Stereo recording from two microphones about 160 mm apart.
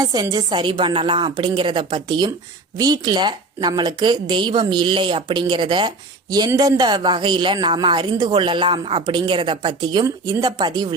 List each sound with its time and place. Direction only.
0.0 s speech: 25° right (ahead or behind)